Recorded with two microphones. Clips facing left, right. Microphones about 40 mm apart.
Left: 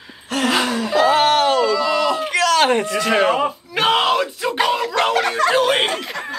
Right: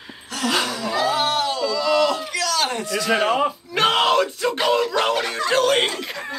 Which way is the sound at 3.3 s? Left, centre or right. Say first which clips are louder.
Left 1 dB; centre.